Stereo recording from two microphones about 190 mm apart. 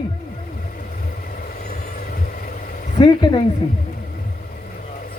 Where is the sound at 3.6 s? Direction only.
30° left (ahead or behind).